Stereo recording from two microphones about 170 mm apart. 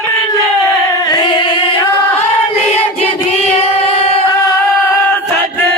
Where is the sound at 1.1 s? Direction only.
25° left (ahead or behind).